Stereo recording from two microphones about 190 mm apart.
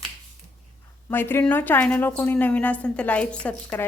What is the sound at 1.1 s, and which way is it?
A woman's voice, 10° left (ahead or behind).